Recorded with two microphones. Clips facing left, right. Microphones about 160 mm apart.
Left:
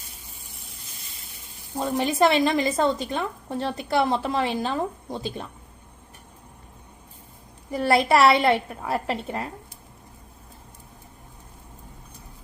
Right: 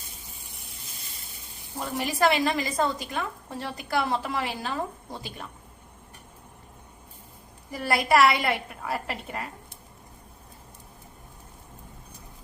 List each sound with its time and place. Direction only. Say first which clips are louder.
1.8 s a woman's voice: left 4 dB; 25° left (ahead or behind)
7.7 s a woman's voice: left 4 dB; 25° left (ahead or behind)